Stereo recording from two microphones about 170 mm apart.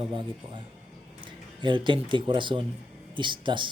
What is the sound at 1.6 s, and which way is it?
Speech, 30° right (ahead or behind).